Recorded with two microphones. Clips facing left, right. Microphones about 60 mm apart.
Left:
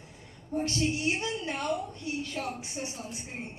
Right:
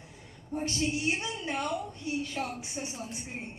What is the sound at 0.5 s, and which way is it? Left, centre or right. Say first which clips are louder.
Speech: left 2 dB; right.